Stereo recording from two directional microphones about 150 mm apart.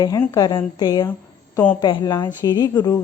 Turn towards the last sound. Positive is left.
turn(degrees=25)  # may be behind; listen again after turning